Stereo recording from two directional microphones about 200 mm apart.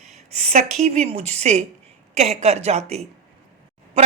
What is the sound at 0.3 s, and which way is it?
Speech, 35° right (ahead or behind).